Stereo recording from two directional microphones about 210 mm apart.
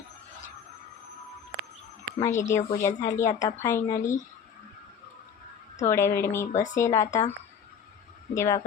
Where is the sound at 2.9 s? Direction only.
35° left (ahead or behind).